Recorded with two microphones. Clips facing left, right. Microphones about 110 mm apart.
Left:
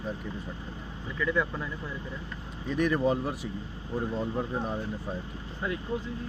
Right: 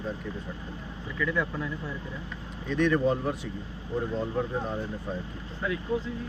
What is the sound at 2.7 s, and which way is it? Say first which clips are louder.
Speech: right 1 dB; 10° left (ahead or behind).